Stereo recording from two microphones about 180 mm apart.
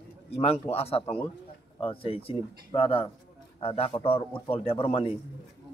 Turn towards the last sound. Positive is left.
turn(degrees=30)  # may be behind; listen again after turning